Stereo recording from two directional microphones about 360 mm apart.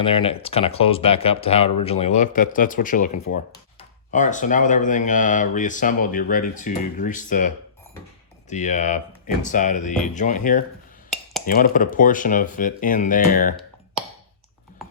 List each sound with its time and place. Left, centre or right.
0.0 s speech: centre